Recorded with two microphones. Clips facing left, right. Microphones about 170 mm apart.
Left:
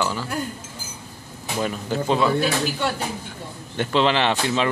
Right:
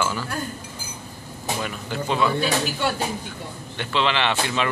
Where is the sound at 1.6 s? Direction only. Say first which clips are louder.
Left 4 dB; 35° left (ahead or behind).